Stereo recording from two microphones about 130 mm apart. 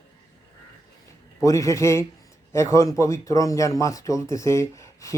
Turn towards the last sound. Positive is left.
turn(degrees=25)  # may be behind; listen again after turning